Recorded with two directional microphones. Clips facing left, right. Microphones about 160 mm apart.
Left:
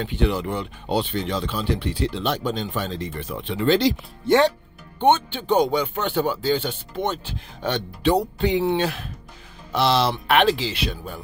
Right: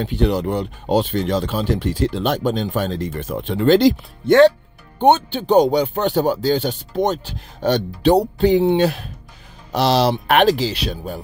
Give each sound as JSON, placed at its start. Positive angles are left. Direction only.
{"t": 0.0, "sound": "speech", "side_deg": -40}
{"t": 4.9, "sound": "speech", "side_deg": -40}